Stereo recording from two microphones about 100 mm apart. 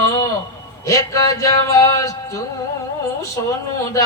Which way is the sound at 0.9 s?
30° left (ahead or behind).